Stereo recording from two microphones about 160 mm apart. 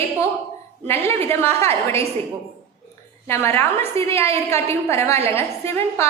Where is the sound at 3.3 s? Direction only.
15° left (ahead or behind).